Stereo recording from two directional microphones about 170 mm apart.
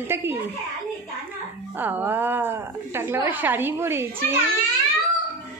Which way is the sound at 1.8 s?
10° right (ahead or behind).